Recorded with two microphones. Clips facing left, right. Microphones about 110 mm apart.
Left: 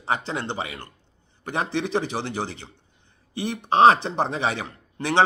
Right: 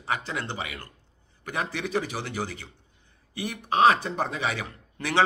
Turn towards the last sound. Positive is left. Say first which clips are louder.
# left 4 dB
turn(degrees=25)  # may be behind; listen again after turning